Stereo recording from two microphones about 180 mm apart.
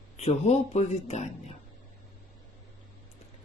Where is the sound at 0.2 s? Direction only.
35° left (ahead or behind).